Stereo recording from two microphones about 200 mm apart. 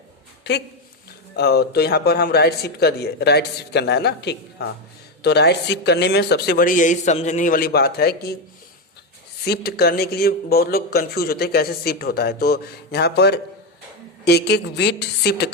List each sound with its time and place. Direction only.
1.4 s speech: 55° left (ahead or behind)
9.4 s a woman's voice: 50° left (ahead or behind)